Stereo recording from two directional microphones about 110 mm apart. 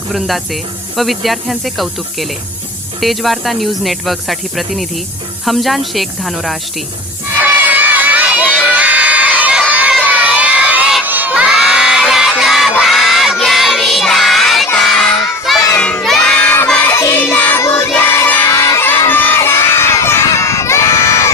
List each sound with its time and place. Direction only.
0.1 s speech: centre (ahead or behind)
7.3 s crowd: 15° right (ahead or behind)
8.6 s children shouting: 15° right (ahead or behind)
11.0 s crowd: 15° right (ahead or behind); by 14.7 s centre (ahead or behind)
14.8 s child singing: centre (ahead or behind)
15.7 s crowd: 10° left (ahead or behind)
16.9 s child singing: 20° left (ahead or behind)
18.3 s music: 15° left (ahead or behind)
18.5 s crowd: 25° left (ahead or behind)